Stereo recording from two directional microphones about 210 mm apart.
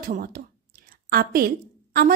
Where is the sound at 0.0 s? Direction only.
45° right (ahead or behind).